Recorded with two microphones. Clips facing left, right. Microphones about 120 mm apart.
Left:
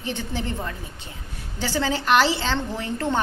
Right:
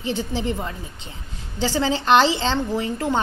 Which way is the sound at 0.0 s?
15° right (ahead or behind).